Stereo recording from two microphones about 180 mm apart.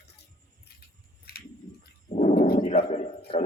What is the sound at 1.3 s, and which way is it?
Bird, 60° left (ahead or behind).